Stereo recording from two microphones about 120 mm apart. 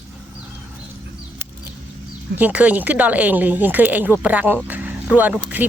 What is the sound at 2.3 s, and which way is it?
Speech, 15° right (ahead or behind).